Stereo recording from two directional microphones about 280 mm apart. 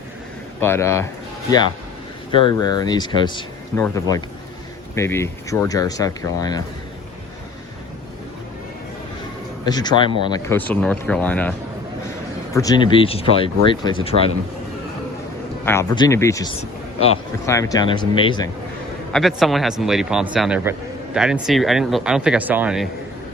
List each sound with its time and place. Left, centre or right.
0.6 s speech: centre
9.6 s a man's voice: centre
12.5 s speech: centre
15.6 s speech: centre
16.6 s speech: left
17.4 s speech: centre
19.1 s a man's voice: centre